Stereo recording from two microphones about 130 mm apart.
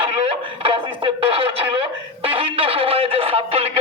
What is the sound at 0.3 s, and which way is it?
Music, 45° right (ahead or behind).